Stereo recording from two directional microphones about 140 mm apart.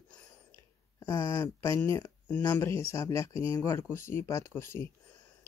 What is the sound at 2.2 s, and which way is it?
Speech, 10° left (ahead or behind).